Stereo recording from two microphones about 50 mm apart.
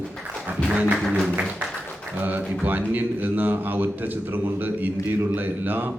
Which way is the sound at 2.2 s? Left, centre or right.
Right.